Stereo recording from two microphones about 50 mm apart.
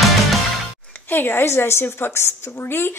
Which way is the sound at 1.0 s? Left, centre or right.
Left.